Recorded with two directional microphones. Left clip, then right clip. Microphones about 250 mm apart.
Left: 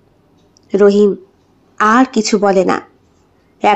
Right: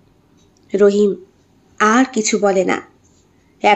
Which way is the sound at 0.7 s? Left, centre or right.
Centre.